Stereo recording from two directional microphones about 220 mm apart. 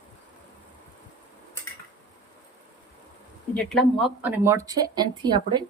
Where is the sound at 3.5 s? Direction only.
Centre (ahead or behind).